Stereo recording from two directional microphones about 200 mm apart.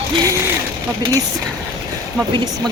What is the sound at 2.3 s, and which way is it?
Speech, 25° right (ahead or behind).